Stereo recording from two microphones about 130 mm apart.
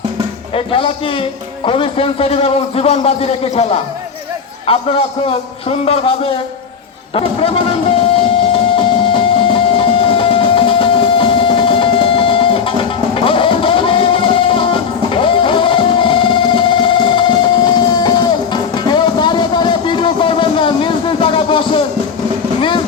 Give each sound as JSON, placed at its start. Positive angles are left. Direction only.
{"t": 0.5, "sound": "a man's voice", "side_deg": 45}
{"t": 8.7, "sound": "music", "side_deg": 45}